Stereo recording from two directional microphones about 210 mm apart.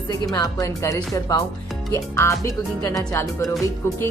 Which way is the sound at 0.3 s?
15° left (ahead or behind).